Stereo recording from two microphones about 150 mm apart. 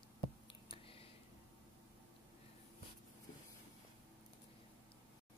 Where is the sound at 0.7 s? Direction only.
35° left (ahead or behind).